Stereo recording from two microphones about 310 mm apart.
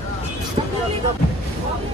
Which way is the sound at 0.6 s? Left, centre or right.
Centre.